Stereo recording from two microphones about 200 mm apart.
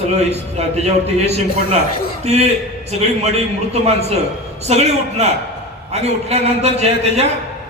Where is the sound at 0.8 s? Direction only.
30° right (ahead or behind).